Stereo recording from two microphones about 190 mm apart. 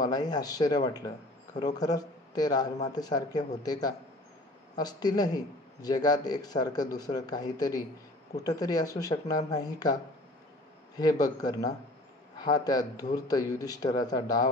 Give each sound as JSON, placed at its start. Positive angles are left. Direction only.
{"t": 0.0, "sound": "speech", "side_deg": 20}
{"t": 11.0, "sound": "speech", "side_deg": 20}